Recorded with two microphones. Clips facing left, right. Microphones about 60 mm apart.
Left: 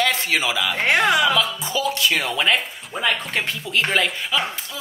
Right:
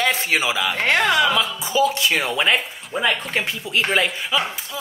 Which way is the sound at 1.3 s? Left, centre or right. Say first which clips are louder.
Even; centre.